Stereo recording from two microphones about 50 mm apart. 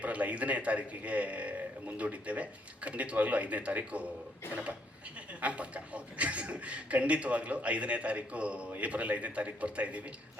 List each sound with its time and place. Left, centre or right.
0.0 s a man's voice: right
5.4 s a man's voice: right